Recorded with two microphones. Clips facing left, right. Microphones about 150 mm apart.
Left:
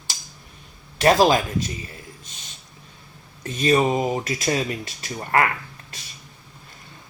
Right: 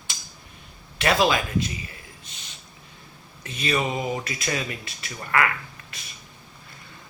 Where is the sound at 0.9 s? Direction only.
40° left (ahead or behind).